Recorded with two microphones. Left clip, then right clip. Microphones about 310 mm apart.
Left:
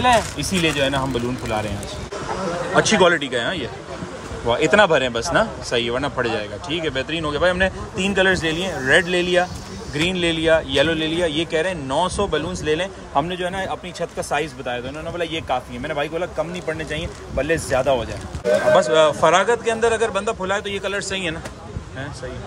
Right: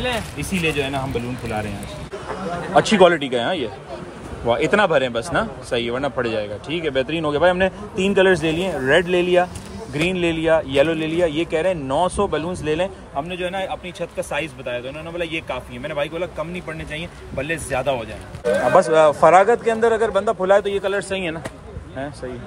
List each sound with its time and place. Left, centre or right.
0.7 s a man's voice: centre
2.7 s a man's voice: centre